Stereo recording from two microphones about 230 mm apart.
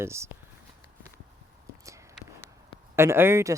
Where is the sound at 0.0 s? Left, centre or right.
Centre.